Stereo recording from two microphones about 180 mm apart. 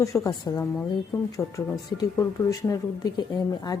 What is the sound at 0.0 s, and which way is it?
A woman's voice, 15° left (ahead or behind).